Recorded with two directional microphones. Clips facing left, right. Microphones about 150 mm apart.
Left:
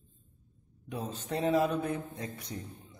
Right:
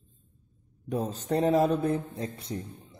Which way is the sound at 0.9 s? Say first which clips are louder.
Right 7 dB; 40° right (ahead or behind).